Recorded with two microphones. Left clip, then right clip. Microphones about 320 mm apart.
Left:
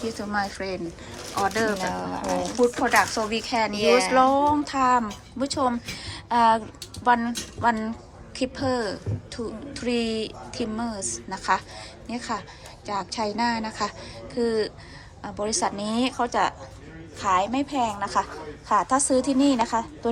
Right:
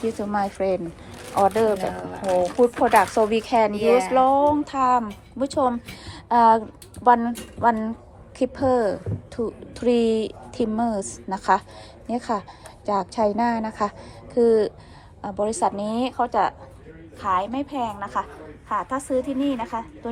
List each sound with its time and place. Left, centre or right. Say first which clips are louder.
0.0 s a woman's voice: right 3 dB; centre